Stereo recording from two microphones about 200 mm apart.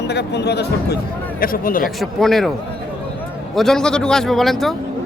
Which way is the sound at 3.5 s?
Centre (ahead or behind).